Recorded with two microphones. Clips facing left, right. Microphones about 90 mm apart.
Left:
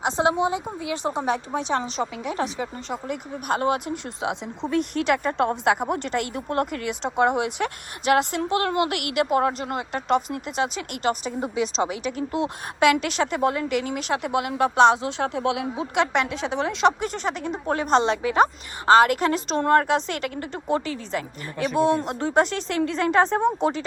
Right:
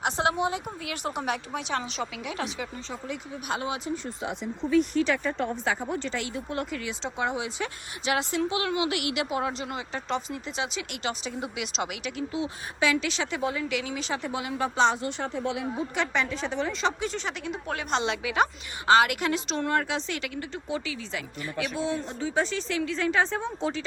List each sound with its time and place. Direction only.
0.0 s a woman's voice: 20° left (ahead or behind); by 2.8 s 40° left (ahead or behind)
2.9 s speech: 50° left (ahead or behind)
3.9 s speech: 85° left
4.7 s a woman's voice: 70° left (ahead or behind); by 12.2 s 35° left (ahead or behind)
12.3 s a woman's voice: 60° left (ahead or behind); by 16.9 s 80° left
17.0 s speech: 45° left (ahead or behind)
21.8 s a woman's voice: 65° left (ahead or behind)
23.0 s speech: 45° left (ahead or behind)